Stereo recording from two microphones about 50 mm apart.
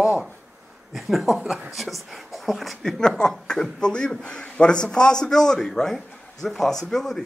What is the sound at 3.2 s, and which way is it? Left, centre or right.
Speech, centre.